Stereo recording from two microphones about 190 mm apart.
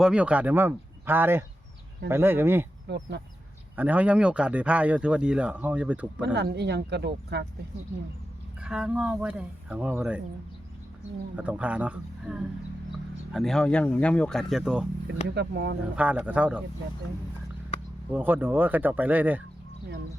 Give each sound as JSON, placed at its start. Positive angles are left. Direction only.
{"t": 0.0, "sound": "speech", "side_deg": -5}
{"t": 2.9, "sound": "speech", "side_deg": -65}
{"t": 3.8, "sound": "speech", "side_deg": -10}
{"t": 6.2, "sound": "speech", "side_deg": -65}
{"t": 8.6, "sound": "speech", "side_deg": -5}
{"t": 11.3, "sound": "speech", "side_deg": -10}
{"t": 15.4, "sound": "speech", "side_deg": -65}
{"t": 16.0, "sound": "speech", "side_deg": -10}
{"t": 18.1, "sound": "speech", "side_deg": -10}